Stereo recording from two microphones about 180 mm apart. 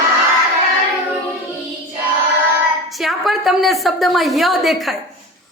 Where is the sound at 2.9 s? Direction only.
Centre (ahead or behind).